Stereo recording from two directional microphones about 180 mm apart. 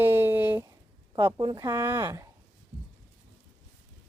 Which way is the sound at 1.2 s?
20° right (ahead or behind).